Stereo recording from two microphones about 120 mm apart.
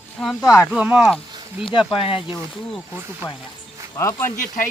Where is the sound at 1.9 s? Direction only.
50° left (ahead or behind).